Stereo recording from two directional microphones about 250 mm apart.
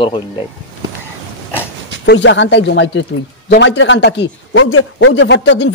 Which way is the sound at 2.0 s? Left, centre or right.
Left.